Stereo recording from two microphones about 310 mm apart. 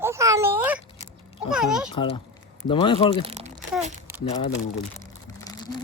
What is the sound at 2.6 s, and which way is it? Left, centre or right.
Speech, centre.